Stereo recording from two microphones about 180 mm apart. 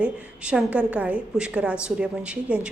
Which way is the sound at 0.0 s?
5° right (ahead or behind).